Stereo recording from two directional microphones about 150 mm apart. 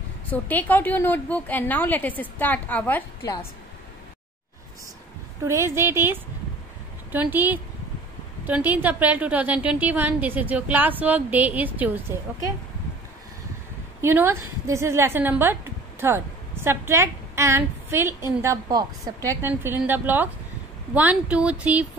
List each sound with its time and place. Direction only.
0.3 s a woman's voice: 10° left (ahead or behind)
5.4 s a woman's voice: 20° right (ahead or behind)
14.0 s a woman's voice: 15° right (ahead or behind)